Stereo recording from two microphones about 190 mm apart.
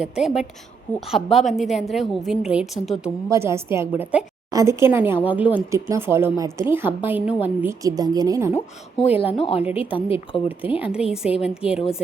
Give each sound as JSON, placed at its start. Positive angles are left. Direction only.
{"t": 0.0, "sound": "a woman's voice", "side_deg": -5}
{"t": 3.2, "sound": "speech", "side_deg": -15}
{"t": 9.0, "sound": "a woman's voice", "side_deg": 30}
{"t": 10.8, "sound": "a woman's voice", "side_deg": -5}